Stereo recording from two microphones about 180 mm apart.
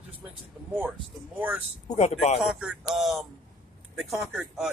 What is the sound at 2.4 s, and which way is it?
Speech, 5° right (ahead or behind).